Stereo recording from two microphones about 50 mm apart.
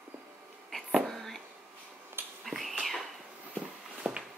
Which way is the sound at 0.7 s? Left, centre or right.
Centre.